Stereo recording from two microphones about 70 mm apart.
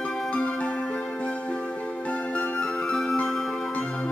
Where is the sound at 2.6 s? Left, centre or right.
Centre.